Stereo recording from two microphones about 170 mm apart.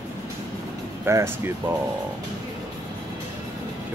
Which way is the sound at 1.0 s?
15° right (ahead or behind).